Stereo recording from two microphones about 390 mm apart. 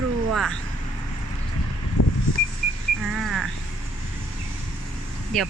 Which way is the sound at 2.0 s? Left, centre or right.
Left.